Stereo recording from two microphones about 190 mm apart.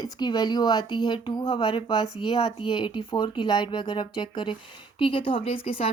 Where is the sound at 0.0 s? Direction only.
20° left (ahead or behind).